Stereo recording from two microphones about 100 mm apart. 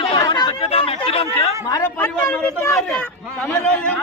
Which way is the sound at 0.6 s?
65° left (ahead or behind).